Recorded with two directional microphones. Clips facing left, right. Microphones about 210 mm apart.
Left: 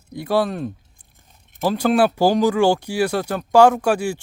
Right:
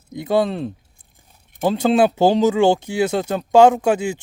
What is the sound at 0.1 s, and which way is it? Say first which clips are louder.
Speech: right 2 dB; 20° right (ahead or behind).